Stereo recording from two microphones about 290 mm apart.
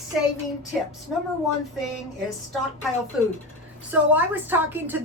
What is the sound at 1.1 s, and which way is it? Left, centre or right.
Speech, centre.